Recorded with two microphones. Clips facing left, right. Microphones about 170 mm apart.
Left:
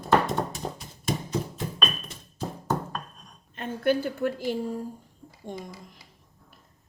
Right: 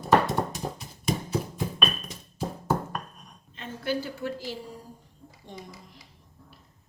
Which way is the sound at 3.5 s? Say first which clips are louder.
Left 6 dB; 55° left (ahead or behind).